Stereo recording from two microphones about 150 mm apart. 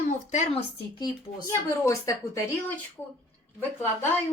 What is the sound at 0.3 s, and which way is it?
Speech, 50° left (ahead or behind).